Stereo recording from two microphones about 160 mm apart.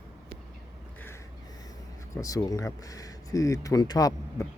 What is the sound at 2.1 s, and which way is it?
Speech, 20° left (ahead or behind).